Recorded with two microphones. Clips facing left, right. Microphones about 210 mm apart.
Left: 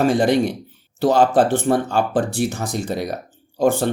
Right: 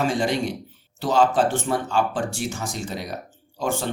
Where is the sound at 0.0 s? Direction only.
60° left (ahead or behind).